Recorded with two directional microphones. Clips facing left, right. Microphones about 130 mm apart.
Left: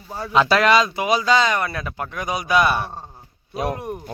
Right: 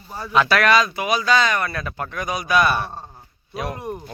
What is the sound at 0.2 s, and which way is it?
Speech, 20° left (ahead or behind).